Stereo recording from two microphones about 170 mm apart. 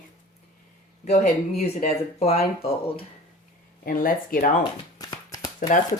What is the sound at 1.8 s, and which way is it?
Speech, 40° left (ahead or behind).